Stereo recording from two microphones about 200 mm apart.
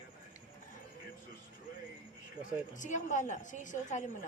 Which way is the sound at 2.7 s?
40° left (ahead or behind).